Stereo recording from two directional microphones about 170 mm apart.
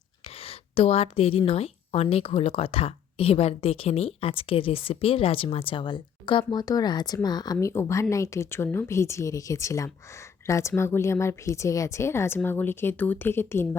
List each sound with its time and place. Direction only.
0.4 s a woman's voice: 35° left (ahead or behind); by 13.7 s 15° left (ahead or behind)